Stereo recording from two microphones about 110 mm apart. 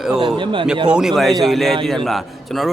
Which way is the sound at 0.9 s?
5° right (ahead or behind).